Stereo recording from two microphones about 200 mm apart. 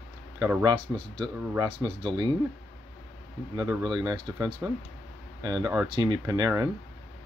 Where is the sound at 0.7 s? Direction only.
25° right (ahead or behind).